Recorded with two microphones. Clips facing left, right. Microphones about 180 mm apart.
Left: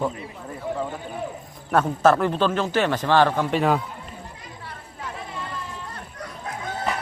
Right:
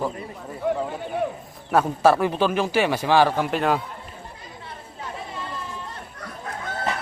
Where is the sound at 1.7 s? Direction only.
10° right (ahead or behind).